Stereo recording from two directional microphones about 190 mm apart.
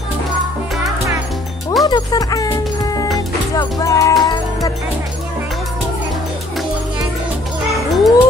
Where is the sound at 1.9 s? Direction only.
20° left (ahead or behind).